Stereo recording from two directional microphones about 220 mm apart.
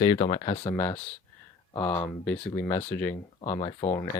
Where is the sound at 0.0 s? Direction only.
25° left (ahead or behind).